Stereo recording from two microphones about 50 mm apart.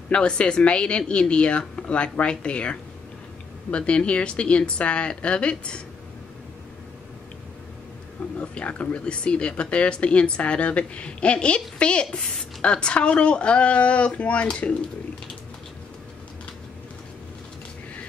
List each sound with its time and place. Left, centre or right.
0.1 s speech: left
8.4 s speech: left